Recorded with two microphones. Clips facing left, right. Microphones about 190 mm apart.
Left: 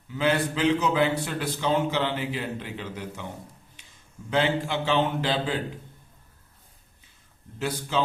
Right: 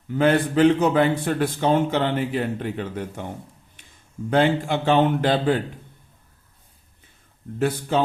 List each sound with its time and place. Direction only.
0.1 s a man's voice: 50° right (ahead or behind)
4.3 s a man's voice: 50° right (ahead or behind)
7.6 s a man's voice: 55° right (ahead or behind)